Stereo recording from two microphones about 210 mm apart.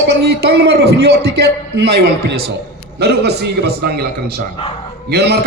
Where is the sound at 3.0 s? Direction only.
50° right (ahead or behind).